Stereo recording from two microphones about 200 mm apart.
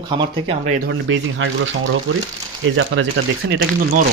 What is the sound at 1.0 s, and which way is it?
Speech, 70° right (ahead or behind).